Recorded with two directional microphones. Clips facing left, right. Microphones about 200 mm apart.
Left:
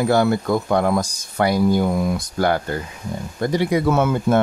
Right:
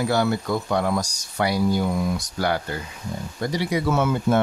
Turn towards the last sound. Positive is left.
turn(degrees=55)  # may be behind; listen again after turning